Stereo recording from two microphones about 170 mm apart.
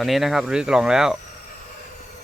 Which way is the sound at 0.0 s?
Centre (ahead or behind).